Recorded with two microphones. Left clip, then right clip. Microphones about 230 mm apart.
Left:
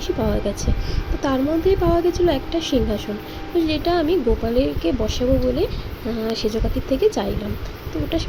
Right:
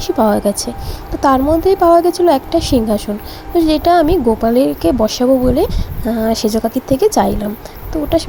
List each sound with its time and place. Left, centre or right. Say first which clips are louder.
0.0 s a woman's voice: right 9 dB; right